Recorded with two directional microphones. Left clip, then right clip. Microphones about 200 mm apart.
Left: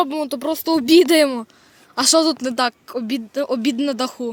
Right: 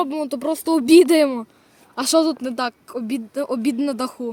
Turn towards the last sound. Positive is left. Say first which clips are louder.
# left 2 dB
turn(degrees=0)  # may be behind; listen again after turning